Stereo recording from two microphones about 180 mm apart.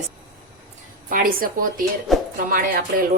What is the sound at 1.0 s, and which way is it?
A woman's voice, 50° right (ahead or behind).